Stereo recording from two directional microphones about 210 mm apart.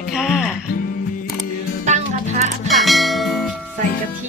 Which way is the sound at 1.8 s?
35° right (ahead or behind).